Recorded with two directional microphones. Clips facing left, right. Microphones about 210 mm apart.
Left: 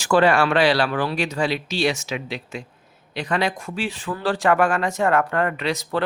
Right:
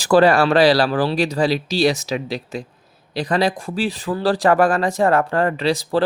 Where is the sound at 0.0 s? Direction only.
35° right (ahead or behind).